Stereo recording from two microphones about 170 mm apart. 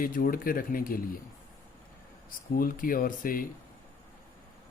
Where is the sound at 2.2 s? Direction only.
55° left (ahead or behind).